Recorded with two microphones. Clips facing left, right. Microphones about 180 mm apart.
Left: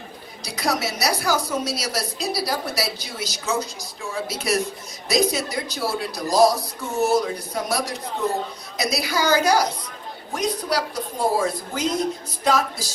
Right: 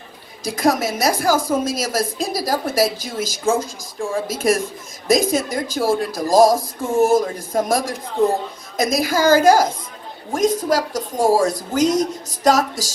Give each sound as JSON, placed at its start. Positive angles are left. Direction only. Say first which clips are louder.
{"t": 0.5, "sound": "speech", "louder": "right 6 dB", "side_deg": -50}
{"t": 11.1, "sound": "speech", "louder": "right 7 dB", "side_deg": -90}
{"t": 11.7, "sound": "speech", "louder": "right 8 dB", "side_deg": -45}